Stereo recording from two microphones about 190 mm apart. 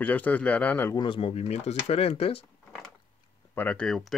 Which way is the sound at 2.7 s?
Centre (ahead or behind).